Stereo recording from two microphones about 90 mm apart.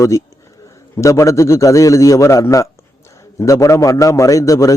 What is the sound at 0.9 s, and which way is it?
A man's voice, 35° left (ahead or behind).